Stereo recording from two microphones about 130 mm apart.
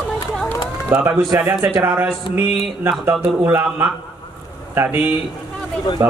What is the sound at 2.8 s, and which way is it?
Speech, 15° right (ahead or behind).